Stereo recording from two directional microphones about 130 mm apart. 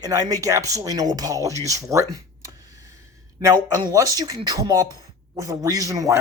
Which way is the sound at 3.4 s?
25° right (ahead or behind).